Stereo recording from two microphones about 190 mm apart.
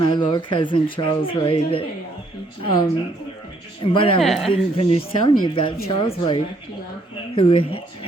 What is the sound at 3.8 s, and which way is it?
Speech, 25° left (ahead or behind).